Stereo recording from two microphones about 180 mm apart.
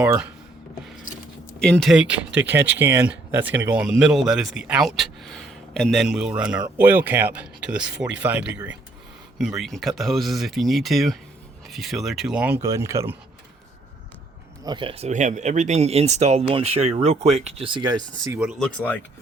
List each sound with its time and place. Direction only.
0.0 s speech: 10° right (ahead or behind)
1.5 s speech: 5° left (ahead or behind)
12.6 s speech: 15° right (ahead or behind)
14.6 s speech: 25° right (ahead or behind)
18.6 s speech: 5° left (ahead or behind)